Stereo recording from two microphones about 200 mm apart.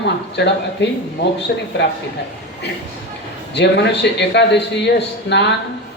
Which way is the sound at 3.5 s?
60° left (ahead or behind).